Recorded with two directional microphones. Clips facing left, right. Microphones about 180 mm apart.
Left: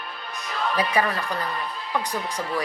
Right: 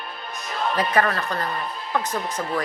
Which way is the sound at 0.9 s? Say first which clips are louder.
Right 4 dB; 10° left (ahead or behind).